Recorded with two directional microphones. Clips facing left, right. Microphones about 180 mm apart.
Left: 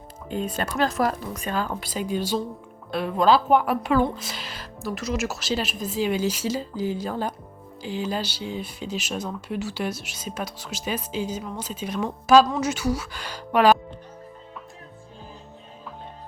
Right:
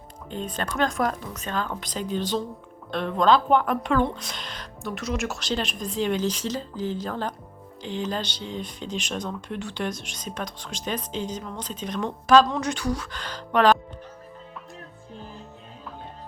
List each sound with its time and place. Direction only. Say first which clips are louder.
0.3 s speech: left 3 dB; 10° left (ahead or behind)